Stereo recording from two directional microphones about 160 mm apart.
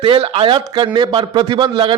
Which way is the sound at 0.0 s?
35° right (ahead or behind).